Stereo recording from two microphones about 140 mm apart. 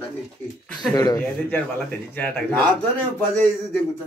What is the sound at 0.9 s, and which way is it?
Speech, 25° left (ahead or behind).